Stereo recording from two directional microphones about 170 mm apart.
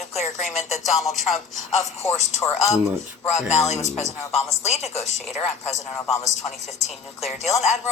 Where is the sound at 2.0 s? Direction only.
40° left (ahead or behind).